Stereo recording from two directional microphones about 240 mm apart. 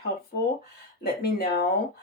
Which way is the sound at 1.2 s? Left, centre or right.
Left.